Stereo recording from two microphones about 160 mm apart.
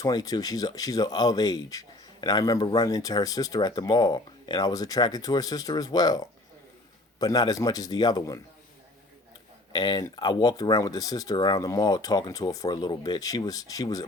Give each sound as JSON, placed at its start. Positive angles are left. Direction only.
{"t": 0.0, "sound": "speech", "side_deg": 25}
{"t": 9.7, "sound": "speech", "side_deg": 25}